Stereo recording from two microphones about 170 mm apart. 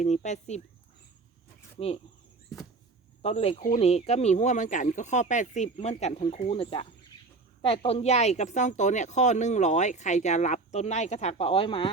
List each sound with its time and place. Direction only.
0.0 s speech: 45° left (ahead or behind)
1.8 s speech: 35° left (ahead or behind)
3.2 s speech: 35° left (ahead or behind)